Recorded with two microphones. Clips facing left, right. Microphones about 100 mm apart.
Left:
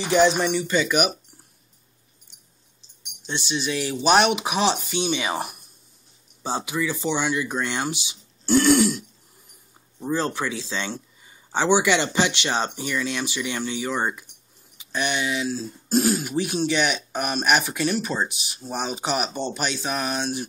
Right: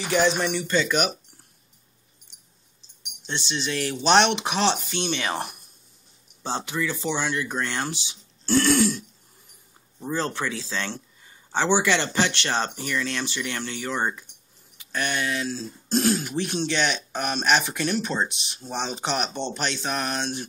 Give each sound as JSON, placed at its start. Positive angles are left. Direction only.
{"t": 0.0, "sound": "speech", "side_deg": 0}
{"t": 3.2, "sound": "speech", "side_deg": 10}
{"t": 14.8, "sound": "a sound", "side_deg": 15}
{"t": 15.0, "sound": "speech", "side_deg": 5}